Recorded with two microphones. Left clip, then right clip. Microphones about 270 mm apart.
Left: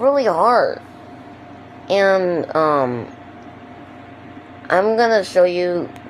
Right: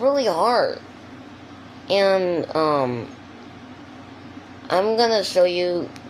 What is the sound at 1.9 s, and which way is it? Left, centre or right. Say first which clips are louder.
Speech: left 3 dB; left.